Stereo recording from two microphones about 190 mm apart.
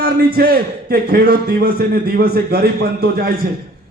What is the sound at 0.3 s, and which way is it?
A man's voice, 55° right (ahead or behind).